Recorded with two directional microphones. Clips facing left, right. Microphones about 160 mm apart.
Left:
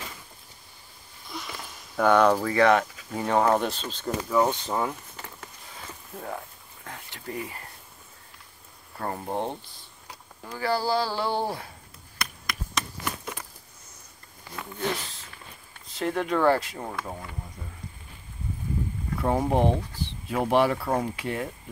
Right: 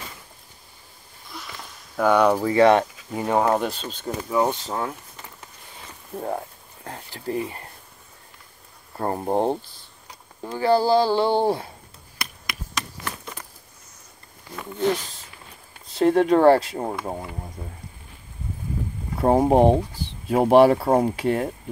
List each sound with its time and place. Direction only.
1.3 s a sound: 5° right (ahead or behind)
2.0 s speech: 10° right (ahead or behind)
2.5 s speech: 25° right (ahead or behind)
3.2 s speech: 10° right (ahead or behind)
4.6 s speech: 5° left (ahead or behind)
6.1 s speech: 35° right (ahead or behind)
8.9 s speech: 40° right (ahead or behind)
10.4 s speech: 25° right (ahead or behind)
12.2 s a sound: 5° right (ahead or behind)
15.9 s speech: 35° right (ahead or behind)
19.1 s speech: 40° right (ahead or behind)